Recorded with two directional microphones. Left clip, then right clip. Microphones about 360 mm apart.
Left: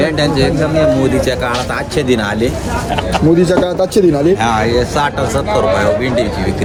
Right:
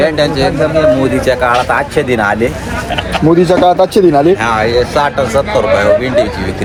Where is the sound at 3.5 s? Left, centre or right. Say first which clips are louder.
Right 5 dB; centre.